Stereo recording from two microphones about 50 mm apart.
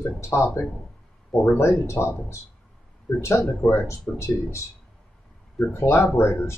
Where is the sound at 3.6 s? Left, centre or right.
Left.